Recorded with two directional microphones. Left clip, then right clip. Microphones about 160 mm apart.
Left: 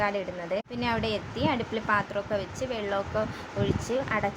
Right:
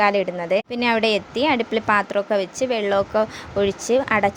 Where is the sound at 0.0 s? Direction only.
50° right (ahead or behind).